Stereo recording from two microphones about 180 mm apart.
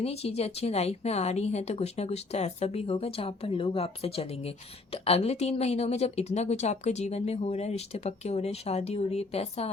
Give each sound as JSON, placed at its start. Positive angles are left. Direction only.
{"t": 0.0, "sound": "speech", "side_deg": 35}